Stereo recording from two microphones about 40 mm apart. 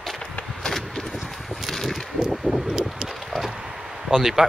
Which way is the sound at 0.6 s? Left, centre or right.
Centre.